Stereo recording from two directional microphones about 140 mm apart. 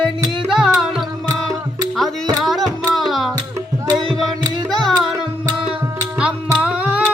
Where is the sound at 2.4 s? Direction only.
Centre (ahead or behind).